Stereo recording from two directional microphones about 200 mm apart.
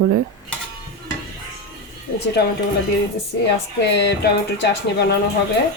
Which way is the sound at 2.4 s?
55° left (ahead or behind).